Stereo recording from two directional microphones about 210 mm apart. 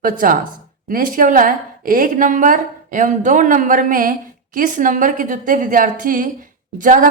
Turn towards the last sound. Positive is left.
turn(degrees=-40)  # may be behind; listen again after turning